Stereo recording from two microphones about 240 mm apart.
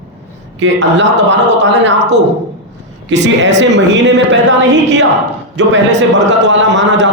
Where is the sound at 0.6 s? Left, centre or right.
Right.